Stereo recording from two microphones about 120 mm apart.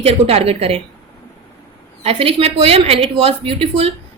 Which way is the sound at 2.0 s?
55° right (ahead or behind).